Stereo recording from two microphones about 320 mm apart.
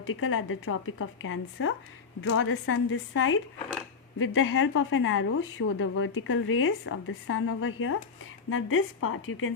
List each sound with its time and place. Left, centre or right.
0.0 s a woman's voice: left